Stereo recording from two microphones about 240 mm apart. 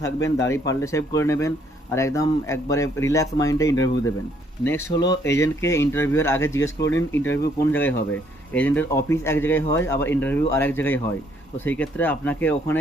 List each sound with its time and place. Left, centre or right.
0.0 s speech: centre
6.7 s speech: left
7.7 s speech: centre